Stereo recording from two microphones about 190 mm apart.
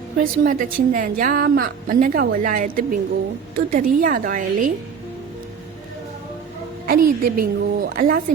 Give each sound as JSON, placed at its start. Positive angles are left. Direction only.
{"t": 0.2, "sound": "a woman's voice", "side_deg": -45}
{"t": 6.8, "sound": "a woman's voice", "side_deg": -50}